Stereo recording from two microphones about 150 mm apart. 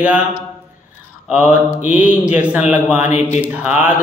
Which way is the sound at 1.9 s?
10° right (ahead or behind).